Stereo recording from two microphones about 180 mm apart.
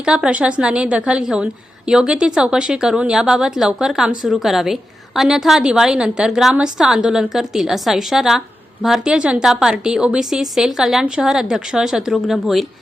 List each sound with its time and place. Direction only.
0.0 s a woman's voice: 5° right (ahead or behind)